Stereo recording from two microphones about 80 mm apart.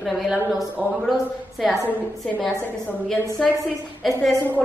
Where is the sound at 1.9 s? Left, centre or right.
Centre.